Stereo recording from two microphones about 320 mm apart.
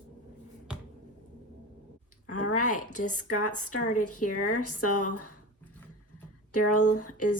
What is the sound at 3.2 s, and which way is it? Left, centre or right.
Speech, left.